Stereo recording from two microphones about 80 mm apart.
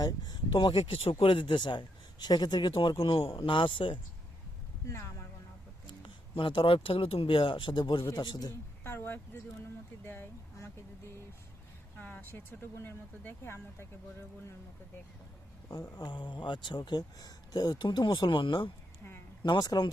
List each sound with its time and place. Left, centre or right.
0.0 s speech: left
4.9 s speech: left
6.0 s speech: left
8.0 s a man's voice: left
8.8 s speech: left
11.9 s speech: left
16.0 s speech: left
17.7 s speech: left
19.4 s speech: left